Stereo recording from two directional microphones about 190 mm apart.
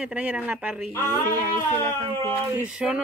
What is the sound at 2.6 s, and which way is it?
Speech, 5° right (ahead or behind).